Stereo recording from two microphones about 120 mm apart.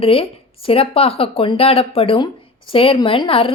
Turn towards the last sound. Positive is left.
turn(degrees=50)  # may be behind; listen again after turning